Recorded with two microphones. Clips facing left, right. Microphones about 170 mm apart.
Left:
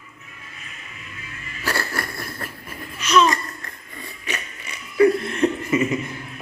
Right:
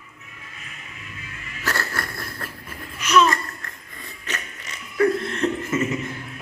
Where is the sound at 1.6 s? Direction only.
10° left (ahead or behind).